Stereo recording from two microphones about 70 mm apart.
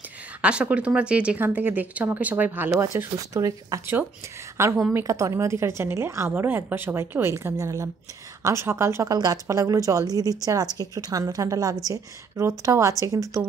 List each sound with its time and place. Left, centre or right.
0.4 s speech: centre
1.4 s speech: right
3.3 s a woman's voice: right
4.6 s speech: right
9.1 s a woman's voice: right